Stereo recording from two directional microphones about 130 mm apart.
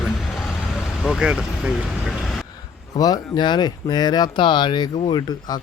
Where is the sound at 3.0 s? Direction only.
30° left (ahead or behind).